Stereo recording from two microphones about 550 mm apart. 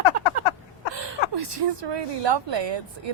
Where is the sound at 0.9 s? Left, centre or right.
Right.